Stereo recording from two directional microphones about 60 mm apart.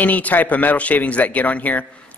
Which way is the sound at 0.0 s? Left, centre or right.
Left.